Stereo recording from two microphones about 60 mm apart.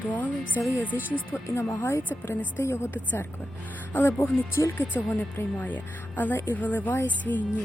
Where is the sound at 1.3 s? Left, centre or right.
Left.